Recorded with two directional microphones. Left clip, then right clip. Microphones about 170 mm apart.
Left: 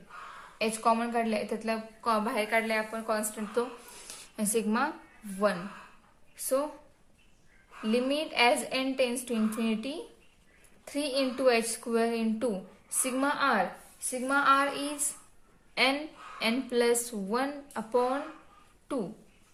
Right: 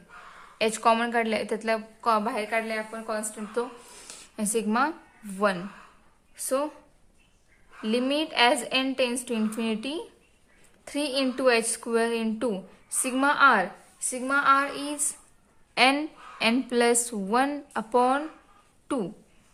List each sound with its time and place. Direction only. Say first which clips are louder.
0.6 s a woman's voice: right 5 dB; 50° right (ahead or behind)
7.8 s a woman's voice: right 3 dB; 35° right (ahead or behind)